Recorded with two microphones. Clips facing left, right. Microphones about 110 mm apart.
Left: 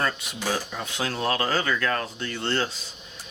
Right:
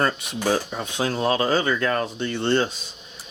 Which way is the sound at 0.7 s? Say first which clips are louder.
Right 4 dB; 30° right (ahead or behind).